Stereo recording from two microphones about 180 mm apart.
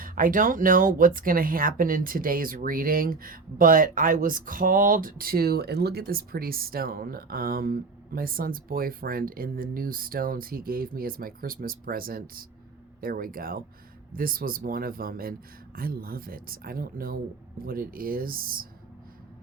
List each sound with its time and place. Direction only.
0.0 s speech: 50° right (ahead or behind)